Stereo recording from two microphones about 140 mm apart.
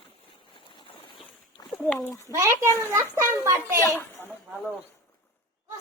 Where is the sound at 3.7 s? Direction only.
20° left (ahead or behind).